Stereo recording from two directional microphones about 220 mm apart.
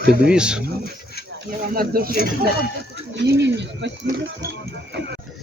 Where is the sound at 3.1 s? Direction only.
50° right (ahead or behind).